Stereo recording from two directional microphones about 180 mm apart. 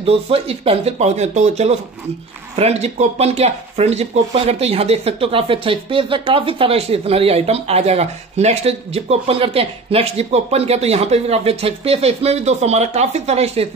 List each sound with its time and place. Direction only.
0.0 s speech: 35° right (ahead or behind)